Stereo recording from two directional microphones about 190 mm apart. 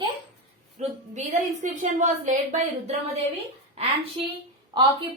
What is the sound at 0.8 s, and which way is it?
A woman's voice, 40° right (ahead or behind).